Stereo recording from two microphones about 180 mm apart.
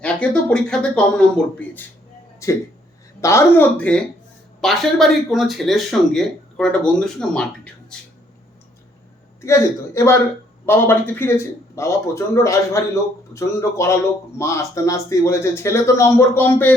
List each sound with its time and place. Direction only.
0.0 s a man's voice: 5° left (ahead or behind)
9.4 s a man's voice: 15° left (ahead or behind)